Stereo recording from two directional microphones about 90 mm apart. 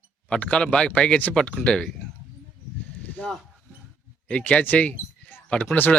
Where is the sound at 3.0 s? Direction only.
15° left (ahead or behind).